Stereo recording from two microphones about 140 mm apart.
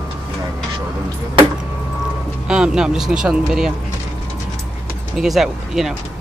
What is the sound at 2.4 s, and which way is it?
Speech, 5° right (ahead or behind).